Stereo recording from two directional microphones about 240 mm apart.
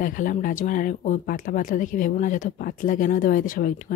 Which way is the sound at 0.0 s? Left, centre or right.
Left.